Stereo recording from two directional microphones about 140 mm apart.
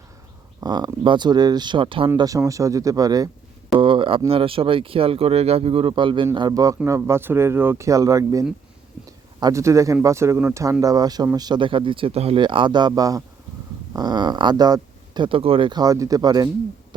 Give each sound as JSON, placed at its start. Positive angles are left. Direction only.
{"t": 0.6, "sound": "speech", "side_deg": -30}
{"t": 2.1, "sound": "speech", "side_deg": -25}
{"t": 3.8, "sound": "speech", "side_deg": -40}